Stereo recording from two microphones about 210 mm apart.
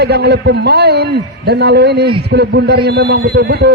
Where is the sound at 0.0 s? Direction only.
50° right (ahead or behind).